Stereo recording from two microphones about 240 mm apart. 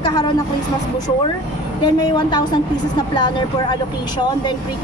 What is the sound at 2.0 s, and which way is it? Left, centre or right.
A woman's voice, centre.